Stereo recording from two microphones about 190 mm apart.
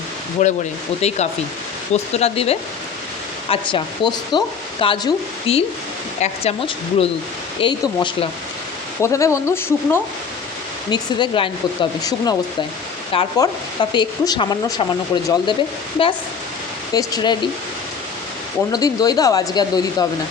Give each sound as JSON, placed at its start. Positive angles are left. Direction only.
{"t": 0.4, "sound": "speech", "side_deg": 40}
{"t": 10.9, "sound": "speech", "side_deg": 25}
{"t": 16.9, "sound": "speech", "side_deg": 20}
{"t": 18.7, "sound": "speech", "side_deg": 20}